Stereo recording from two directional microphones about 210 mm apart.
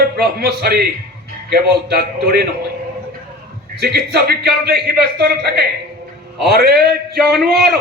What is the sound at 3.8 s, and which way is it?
A man's voice, 50° right (ahead or behind).